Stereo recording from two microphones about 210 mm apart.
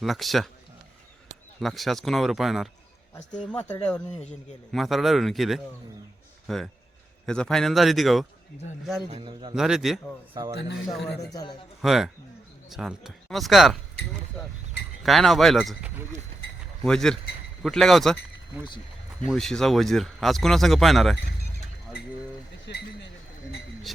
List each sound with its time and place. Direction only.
0.0 s speech: centre (ahead or behind)
1.6 s speech: centre (ahead or behind)
9.0 s a man's voice: 25° right (ahead or behind)
9.6 s speech: centre (ahead or behind)
10.3 s a man's voice: 20° right (ahead or behind)
10.9 s speech: centre (ahead or behind)
19.3 s speech: centre (ahead or behind)
22.6 s a sound: 55° left (ahead or behind)